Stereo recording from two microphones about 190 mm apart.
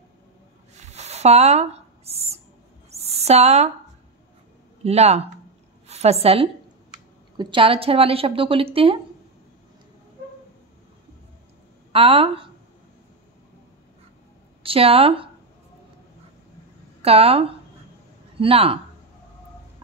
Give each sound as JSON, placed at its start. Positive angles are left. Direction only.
{"t": 0.7, "sound": "a sound", "side_deg": -35}
{"t": 4.8, "sound": "a woman's voice", "side_deg": -35}
{"t": 11.9, "sound": "a woman's voice", "side_deg": -30}
{"t": 14.6, "sound": "a woman's voice", "side_deg": -30}
{"t": 17.0, "sound": "a woman's voice", "side_deg": -30}